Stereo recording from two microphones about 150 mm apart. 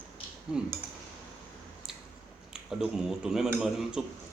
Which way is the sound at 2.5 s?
5° right (ahead or behind).